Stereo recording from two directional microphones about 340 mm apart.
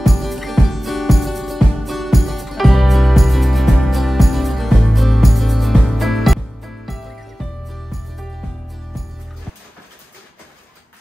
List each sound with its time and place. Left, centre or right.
0.0 s music: centre